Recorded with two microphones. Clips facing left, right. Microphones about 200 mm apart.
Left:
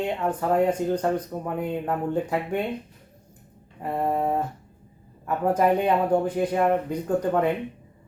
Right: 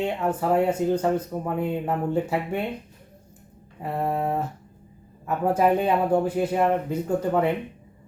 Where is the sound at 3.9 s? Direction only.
10° left (ahead or behind).